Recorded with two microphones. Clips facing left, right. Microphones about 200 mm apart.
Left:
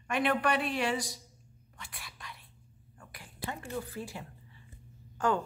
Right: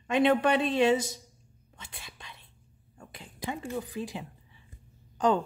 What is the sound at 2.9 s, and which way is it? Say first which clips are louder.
Speech: right 4 dB; 25° right (ahead or behind).